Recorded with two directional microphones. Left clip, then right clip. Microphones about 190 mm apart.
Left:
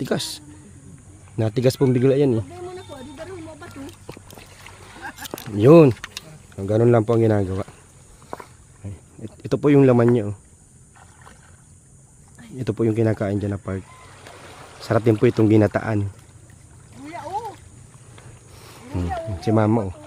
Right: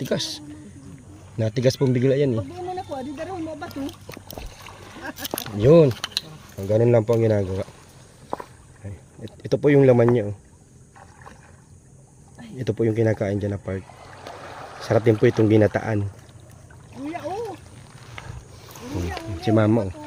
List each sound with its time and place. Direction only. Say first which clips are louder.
0.0 s speech: even; 30° left (ahead or behind)
2.5 s a sound: right 5 dB; 50° left (ahead or behind)
5.5 s speech: left 3 dB; 35° left (ahead or behind)
8.3 s walk: right 4 dB; 40° left (ahead or behind)
9.4 s speech: left 1 dB; 25° left (ahead or behind)
12.5 s speech: left 1 dB; 25° left (ahead or behind)
14.8 s speech: even; 25° left (ahead or behind)
17.1 s boat: even; 35° left (ahead or behind)
19.5 s speech: even; 15° left (ahead or behind)